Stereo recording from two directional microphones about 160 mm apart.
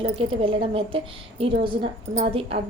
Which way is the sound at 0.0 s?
35° right (ahead or behind).